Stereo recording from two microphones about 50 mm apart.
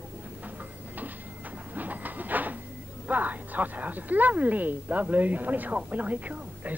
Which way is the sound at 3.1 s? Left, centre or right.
Right.